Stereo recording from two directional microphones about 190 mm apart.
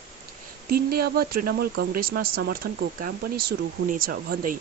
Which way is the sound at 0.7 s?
55° right (ahead or behind).